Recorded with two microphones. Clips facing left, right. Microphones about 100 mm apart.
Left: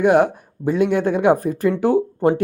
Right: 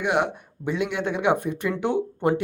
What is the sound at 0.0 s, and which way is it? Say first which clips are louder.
Speech: left 9 dB; 40° left (ahead or behind).